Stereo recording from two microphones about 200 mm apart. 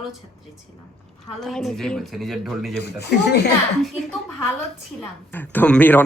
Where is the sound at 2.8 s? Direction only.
55° left (ahead or behind).